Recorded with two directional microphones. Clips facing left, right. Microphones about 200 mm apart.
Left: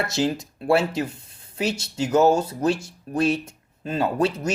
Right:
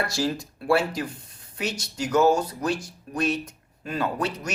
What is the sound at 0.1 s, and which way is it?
Speech, 20° left (ahead or behind).